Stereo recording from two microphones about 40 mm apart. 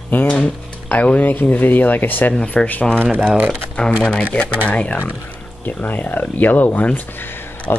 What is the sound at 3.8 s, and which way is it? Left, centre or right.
Speech, left.